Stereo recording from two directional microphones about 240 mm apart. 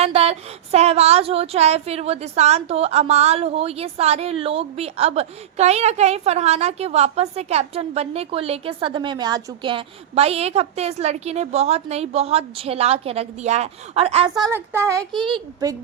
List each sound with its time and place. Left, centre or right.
0.0 s speech: right